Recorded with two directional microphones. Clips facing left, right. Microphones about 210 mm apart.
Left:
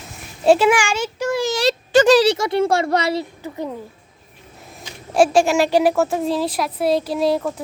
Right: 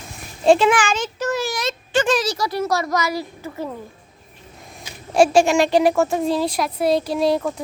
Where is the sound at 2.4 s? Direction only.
25° left (ahead or behind).